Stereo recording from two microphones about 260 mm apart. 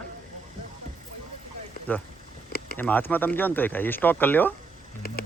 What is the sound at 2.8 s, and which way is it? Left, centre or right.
Speech, centre.